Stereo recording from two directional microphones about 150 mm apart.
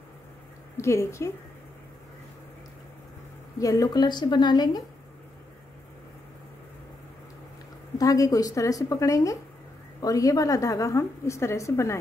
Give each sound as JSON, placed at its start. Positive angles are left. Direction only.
{"t": 0.7, "sound": "a woman's voice", "side_deg": 20}
{"t": 3.5, "sound": "a woman's voice", "side_deg": 25}
{"t": 8.0, "sound": "a woman's voice", "side_deg": 25}